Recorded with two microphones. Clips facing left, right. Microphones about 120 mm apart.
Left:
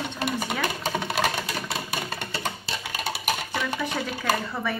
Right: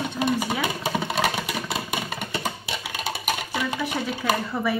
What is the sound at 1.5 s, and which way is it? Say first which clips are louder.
Music: right 2 dB; 15° right (ahead or behind).